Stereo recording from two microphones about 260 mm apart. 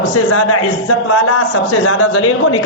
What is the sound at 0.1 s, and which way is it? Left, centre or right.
A man's voice, left.